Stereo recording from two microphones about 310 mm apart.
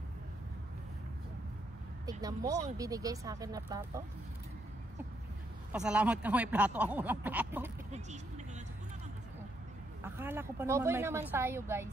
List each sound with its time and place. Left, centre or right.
2.0 s a woman's voice: centre
5.7 s speech: centre
7.9 s speech: right
10.0 s a woman's voice: centre